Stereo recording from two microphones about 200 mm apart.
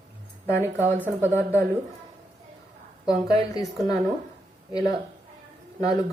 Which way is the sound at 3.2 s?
20° left (ahead or behind).